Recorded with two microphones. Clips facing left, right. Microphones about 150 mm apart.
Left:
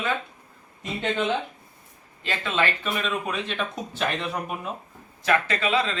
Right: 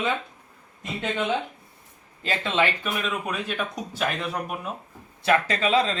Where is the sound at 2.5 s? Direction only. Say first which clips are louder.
Right 1 dB; 5° right (ahead or behind).